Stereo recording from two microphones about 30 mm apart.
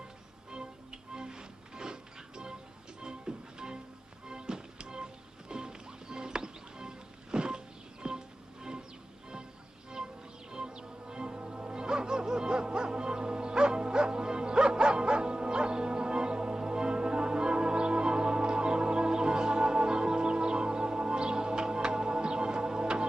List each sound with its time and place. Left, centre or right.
0.5 s music: right
10.5 s music: right